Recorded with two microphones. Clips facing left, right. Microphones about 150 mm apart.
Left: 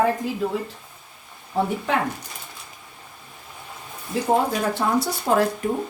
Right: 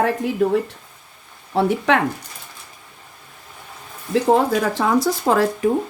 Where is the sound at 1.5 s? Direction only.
80° right.